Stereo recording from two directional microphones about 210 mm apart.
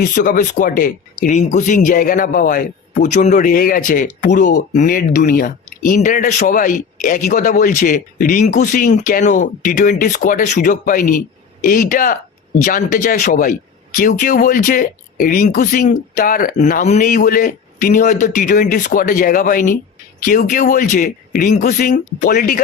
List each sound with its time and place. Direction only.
0.0 s speech: 40° left (ahead or behind)